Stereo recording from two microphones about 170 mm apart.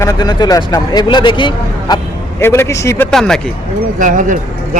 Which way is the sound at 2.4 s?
15° left (ahead or behind).